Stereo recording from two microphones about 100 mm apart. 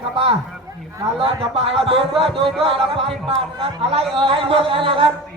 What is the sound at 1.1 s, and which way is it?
Speech, 70° right (ahead or behind).